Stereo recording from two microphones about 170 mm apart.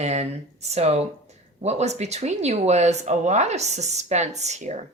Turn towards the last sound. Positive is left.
turn(degrees=-45)  # may be behind; listen again after turning